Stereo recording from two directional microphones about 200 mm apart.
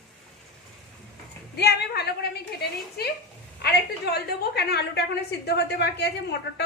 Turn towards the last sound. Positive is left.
turn(degrees=55)  # may be behind; listen again after turning